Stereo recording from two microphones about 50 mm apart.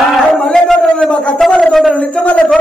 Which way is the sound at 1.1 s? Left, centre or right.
Left.